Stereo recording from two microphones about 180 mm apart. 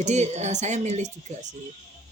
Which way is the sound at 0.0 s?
40° right (ahead or behind).